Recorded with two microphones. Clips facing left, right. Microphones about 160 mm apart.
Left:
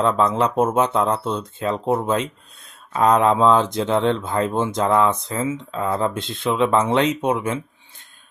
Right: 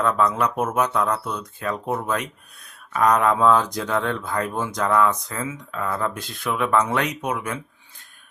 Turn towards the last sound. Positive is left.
turn(degrees=25)  # may be behind; listen again after turning